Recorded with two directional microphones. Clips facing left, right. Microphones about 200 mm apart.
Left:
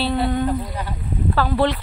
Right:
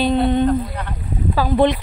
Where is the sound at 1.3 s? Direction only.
15° right (ahead or behind).